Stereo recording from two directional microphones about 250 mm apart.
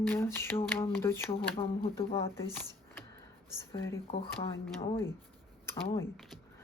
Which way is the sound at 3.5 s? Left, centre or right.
Centre.